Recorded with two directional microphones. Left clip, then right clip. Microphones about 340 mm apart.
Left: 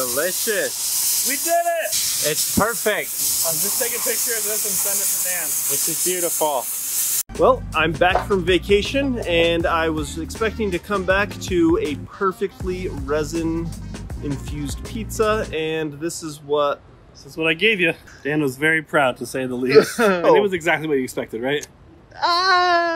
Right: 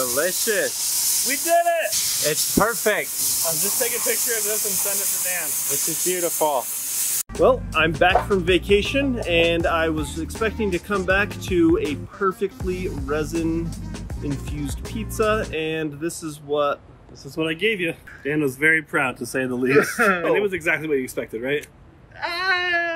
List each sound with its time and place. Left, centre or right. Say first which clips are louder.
0.0 s speech: even; centre
17.6 s speech: left 5 dB; left
19.1 s speech: right 1 dB; centre
20.2 s speech: left 5 dB; left
22.2 s speech: left 6 dB; centre